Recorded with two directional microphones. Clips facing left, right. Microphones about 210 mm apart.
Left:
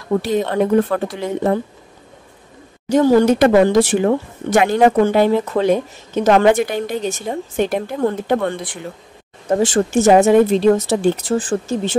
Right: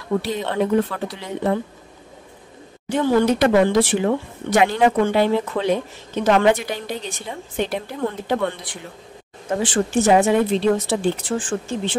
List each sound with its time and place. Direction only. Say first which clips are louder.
0.5 s speech: left 2 dB; 50° left (ahead or behind)
2.9 s speech: left 5 dB; 40° left (ahead or behind)